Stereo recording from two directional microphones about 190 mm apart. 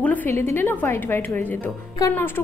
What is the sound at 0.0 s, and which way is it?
Speech, 10° left (ahead or behind).